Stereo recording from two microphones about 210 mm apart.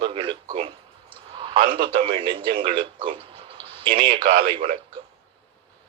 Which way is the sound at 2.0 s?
25° right (ahead or behind).